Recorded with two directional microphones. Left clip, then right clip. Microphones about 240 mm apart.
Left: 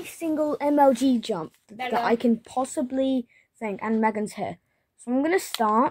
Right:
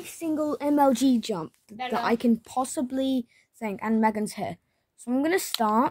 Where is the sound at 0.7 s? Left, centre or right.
Right.